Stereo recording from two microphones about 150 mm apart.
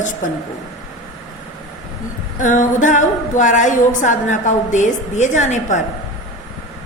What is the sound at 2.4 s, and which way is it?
A woman's voice, 60° left (ahead or behind).